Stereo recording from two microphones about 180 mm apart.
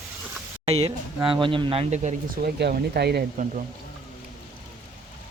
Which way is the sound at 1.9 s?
40° right (ahead or behind).